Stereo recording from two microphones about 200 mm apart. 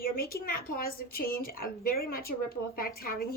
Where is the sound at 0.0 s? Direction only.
50° left (ahead or behind).